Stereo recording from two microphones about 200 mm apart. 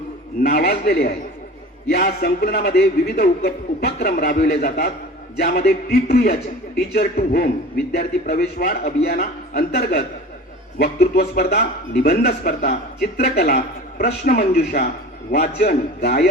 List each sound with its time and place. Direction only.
0.4 s a man's voice: 50° left (ahead or behind)